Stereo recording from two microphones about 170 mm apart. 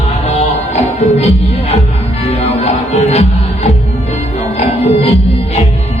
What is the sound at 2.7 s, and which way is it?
Music, 40° left (ahead or behind).